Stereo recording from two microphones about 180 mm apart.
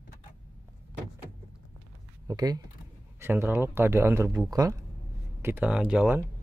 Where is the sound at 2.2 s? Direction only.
20° right (ahead or behind).